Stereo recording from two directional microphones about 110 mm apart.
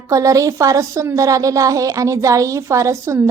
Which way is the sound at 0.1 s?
30° right (ahead or behind).